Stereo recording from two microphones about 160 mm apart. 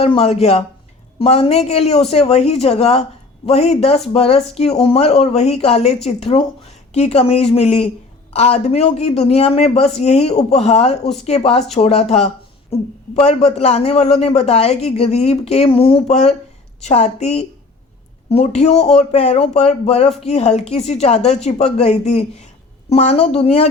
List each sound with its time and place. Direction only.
0.0 s speech: 40° left (ahead or behind)